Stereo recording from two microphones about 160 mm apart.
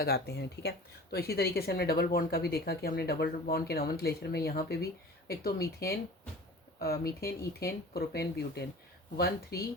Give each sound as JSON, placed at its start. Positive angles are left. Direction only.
{"t": 0.0, "sound": "speech", "side_deg": 85}
{"t": 1.1, "sound": "speech", "side_deg": 75}